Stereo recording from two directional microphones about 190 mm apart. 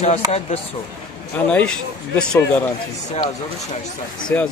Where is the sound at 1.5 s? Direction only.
5° left (ahead or behind).